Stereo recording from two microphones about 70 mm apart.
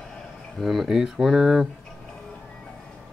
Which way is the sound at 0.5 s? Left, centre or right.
Centre.